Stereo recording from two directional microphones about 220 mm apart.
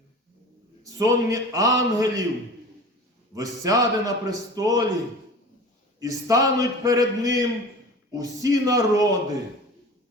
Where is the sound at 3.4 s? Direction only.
15° right (ahead or behind).